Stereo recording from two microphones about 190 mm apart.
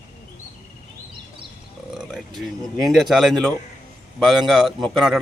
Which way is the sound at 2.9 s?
Centre (ahead or behind).